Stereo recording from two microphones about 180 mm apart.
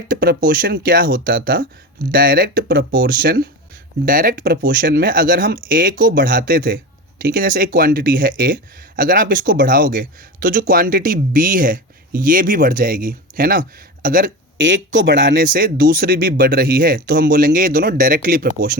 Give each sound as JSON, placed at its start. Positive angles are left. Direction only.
{"t": 0.1, "sound": "speech", "side_deg": -55}
{"t": 14.9, "sound": "speech", "side_deg": -80}
{"t": 15.4, "sound": "speech", "side_deg": -50}